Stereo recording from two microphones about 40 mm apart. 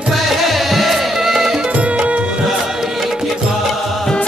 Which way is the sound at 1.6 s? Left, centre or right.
Right.